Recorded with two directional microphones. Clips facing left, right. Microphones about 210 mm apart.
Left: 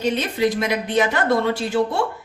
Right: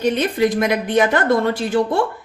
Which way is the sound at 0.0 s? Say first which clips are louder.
Right 3 dB; 50° right (ahead or behind).